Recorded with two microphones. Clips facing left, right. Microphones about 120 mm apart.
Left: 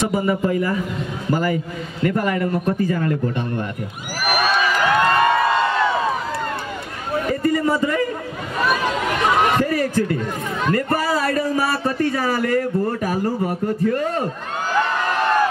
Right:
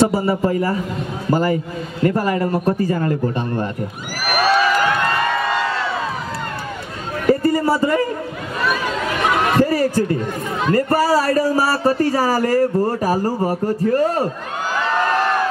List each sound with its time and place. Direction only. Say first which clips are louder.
0.0 s a man's voice: right 3 dB; 35° right (ahead or behind)
7.2 s a sound: right 5 dB; 35° right (ahead or behind)
9.6 s a man's voice: right 3 dB; 35° right (ahead or behind)